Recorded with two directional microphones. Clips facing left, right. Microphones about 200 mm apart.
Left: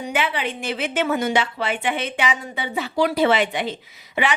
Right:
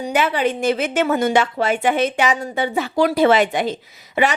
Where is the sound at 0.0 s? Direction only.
40° right (ahead or behind).